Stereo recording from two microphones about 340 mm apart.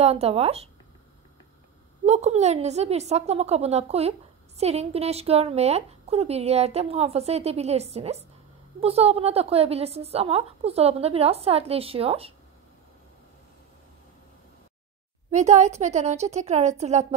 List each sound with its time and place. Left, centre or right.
0.0 s a woman's voice: centre
2.0 s a woman's voice: centre
15.3 s a woman's voice: right